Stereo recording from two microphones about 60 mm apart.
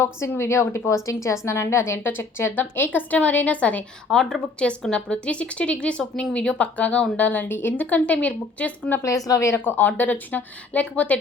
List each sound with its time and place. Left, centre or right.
0.3 s a woman's voice: left
4.1 s a woman's voice: centre; by 9.0 s left
9.0 s speech: left
9.6 s a woman's voice: left